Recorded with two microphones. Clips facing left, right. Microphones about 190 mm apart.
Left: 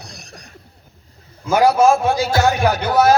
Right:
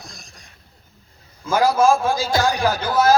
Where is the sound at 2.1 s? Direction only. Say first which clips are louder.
Left 3 dB; 70° left (ahead or behind).